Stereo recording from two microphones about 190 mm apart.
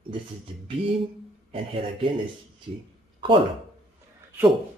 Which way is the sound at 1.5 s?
30° right (ahead or behind).